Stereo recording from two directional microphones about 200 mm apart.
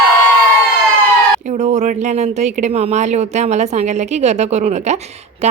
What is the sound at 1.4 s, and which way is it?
Speech, 35° right (ahead or behind).